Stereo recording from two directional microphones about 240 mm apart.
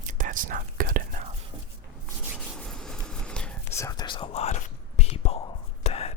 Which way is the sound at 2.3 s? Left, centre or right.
Centre.